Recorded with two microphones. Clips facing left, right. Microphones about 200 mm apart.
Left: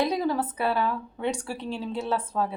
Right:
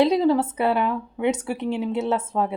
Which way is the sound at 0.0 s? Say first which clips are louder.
Right 7 dB; 25° right (ahead or behind).